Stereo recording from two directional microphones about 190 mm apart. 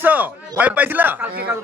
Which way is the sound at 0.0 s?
10° right (ahead or behind).